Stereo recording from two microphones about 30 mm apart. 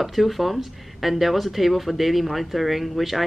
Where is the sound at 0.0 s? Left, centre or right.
Centre.